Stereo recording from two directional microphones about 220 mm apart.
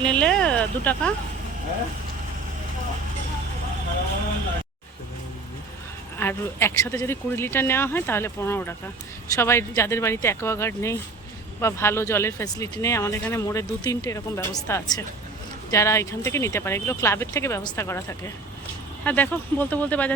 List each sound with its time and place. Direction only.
0.0 s speech: 5° left (ahead or behind)
6.1 s speech: 10° left (ahead or behind)